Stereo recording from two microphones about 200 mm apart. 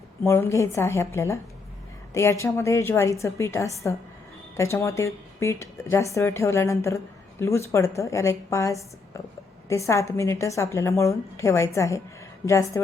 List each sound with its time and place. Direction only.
0.2 s speech: 10° left (ahead or behind)